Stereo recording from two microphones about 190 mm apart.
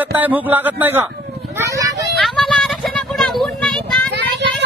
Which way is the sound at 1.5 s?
15° right (ahead or behind).